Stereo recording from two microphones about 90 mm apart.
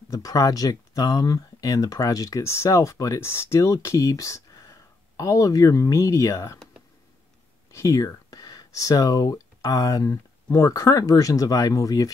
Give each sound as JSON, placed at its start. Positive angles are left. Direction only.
{"t": 0.1, "sound": "speech", "side_deg": 40}
{"t": 7.7, "sound": "speech", "side_deg": 40}